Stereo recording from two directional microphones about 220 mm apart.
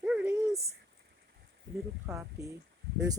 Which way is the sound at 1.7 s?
50° right (ahead or behind).